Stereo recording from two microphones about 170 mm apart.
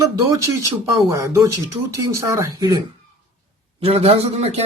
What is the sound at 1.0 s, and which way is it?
Speech, 15° right (ahead or behind).